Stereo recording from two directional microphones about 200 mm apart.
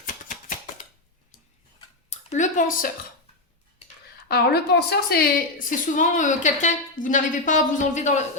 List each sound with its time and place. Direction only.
0.0 s a sound: 40° left (ahead or behind)
2.0 s speech: 35° left (ahead or behind)
4.3 s a woman's voice: 55° left (ahead or behind); by 8.3 s 35° left (ahead or behind)